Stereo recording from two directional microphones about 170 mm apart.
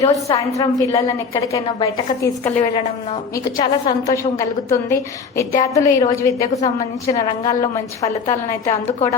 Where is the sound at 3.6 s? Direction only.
25° left (ahead or behind).